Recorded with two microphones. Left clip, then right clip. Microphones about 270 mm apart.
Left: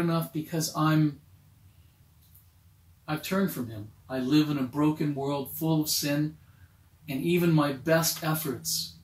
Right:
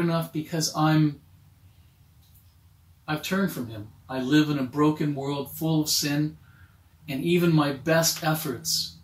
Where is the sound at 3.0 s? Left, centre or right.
Centre.